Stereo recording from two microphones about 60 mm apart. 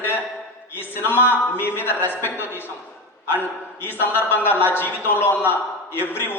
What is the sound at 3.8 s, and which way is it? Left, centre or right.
A man's voice, left.